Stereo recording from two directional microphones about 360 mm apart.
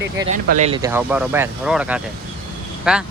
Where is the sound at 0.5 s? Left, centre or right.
Centre.